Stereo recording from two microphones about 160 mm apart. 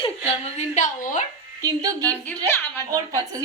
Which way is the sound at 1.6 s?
20° right (ahead or behind).